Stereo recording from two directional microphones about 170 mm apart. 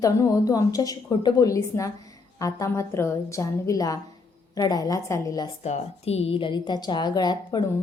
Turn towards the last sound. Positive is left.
turn(degrees=25)  # may be behind; listen again after turning